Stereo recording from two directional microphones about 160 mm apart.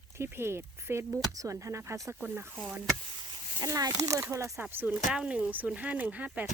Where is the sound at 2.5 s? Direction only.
Centre (ahead or behind).